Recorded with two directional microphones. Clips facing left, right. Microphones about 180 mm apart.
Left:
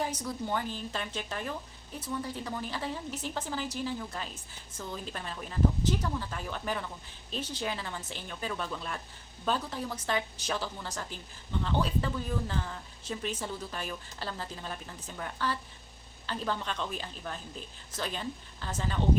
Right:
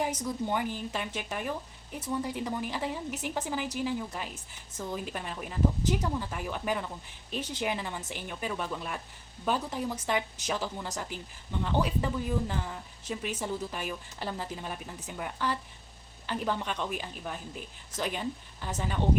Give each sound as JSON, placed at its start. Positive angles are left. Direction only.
{"t": 0.0, "sound": "speech", "side_deg": -20}